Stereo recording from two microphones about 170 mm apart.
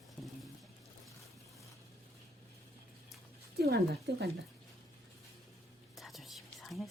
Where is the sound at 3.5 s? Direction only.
70° right (ahead or behind).